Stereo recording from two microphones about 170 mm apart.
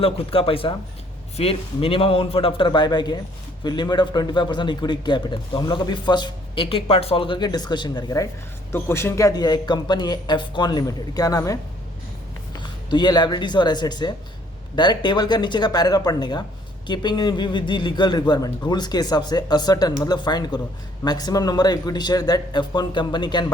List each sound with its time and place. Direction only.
0.0 s a man's voice: 35° left (ahead or behind)
12.5 s a man's voice: 25° left (ahead or behind)